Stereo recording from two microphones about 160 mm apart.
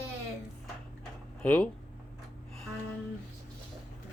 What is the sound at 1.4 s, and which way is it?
Speech, 10° left (ahead or behind).